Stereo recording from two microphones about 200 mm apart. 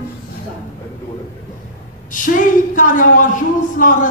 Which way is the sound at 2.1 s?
40° left (ahead or behind).